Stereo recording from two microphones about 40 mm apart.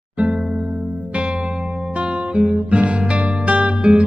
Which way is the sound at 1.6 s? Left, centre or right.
Right.